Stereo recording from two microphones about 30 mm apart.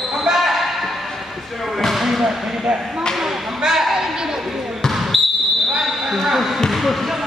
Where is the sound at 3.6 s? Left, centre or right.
Centre.